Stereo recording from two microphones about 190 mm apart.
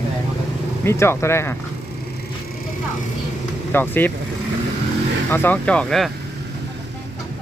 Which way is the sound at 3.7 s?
10° left (ahead or behind).